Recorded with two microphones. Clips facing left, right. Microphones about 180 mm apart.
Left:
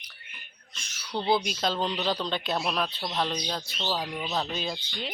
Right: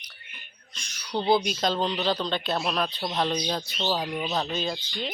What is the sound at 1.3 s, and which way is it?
Speech, 5° left (ahead or behind).